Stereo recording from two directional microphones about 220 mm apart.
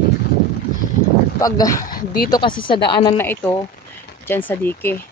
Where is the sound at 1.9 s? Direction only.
45° left (ahead or behind).